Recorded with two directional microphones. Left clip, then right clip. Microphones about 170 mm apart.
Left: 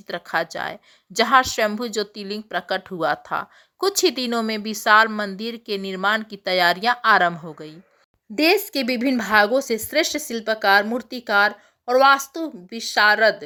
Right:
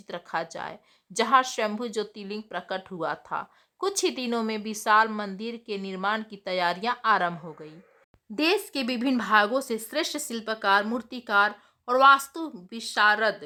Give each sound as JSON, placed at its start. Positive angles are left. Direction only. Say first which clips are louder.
{"t": 0.1, "sound": "speech", "louder": "left 7 dB", "side_deg": 15}